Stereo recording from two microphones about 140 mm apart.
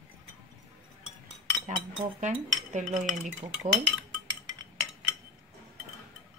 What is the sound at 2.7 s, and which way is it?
Cutlery, 60° right (ahead or behind).